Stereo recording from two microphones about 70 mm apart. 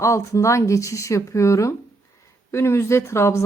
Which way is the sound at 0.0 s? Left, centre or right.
Left.